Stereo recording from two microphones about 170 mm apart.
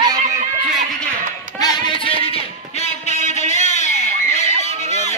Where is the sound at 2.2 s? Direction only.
35° left (ahead or behind).